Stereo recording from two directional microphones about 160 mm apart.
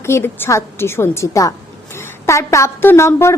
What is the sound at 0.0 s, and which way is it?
A woman's voice, 15° left (ahead or behind).